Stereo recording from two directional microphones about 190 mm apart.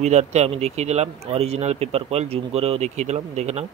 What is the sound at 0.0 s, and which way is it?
Speech, 35° right (ahead or behind).